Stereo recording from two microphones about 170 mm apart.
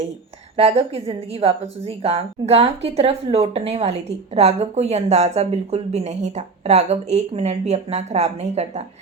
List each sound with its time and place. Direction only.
0.5 s a woman's voice: 35° right (ahead or behind)